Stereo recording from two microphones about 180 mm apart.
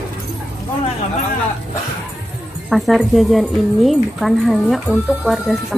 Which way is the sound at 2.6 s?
Centre (ahead or behind).